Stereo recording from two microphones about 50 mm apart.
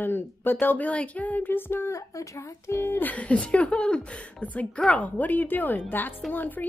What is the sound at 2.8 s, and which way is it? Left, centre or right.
A woman's voice, left.